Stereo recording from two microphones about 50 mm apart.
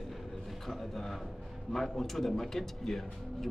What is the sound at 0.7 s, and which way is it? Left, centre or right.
Speech, centre.